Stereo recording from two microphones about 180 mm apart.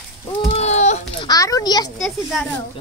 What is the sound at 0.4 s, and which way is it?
Baby cry, 35° left (ahead or behind).